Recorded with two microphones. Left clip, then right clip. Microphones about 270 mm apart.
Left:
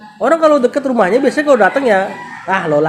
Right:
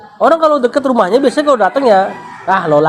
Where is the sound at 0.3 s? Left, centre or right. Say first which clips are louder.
Even; right.